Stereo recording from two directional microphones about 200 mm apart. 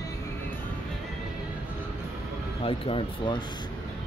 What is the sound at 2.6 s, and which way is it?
Speech, 25° left (ahead or behind).